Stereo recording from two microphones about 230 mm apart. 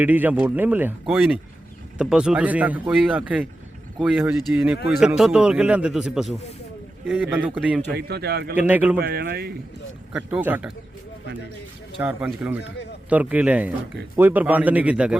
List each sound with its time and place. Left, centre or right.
0.0 s a man's voice: centre
7.9 s speech: right
8.5 s speech: centre
9.0 s speech: right
10.1 s a man's voice: centre
12.0 s speech: centre